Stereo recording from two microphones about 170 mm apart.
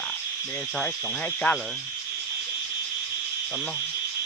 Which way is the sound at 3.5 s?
Centre (ahead or behind).